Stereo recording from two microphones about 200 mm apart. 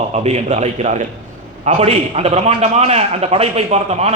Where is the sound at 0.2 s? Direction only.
30° right (ahead or behind).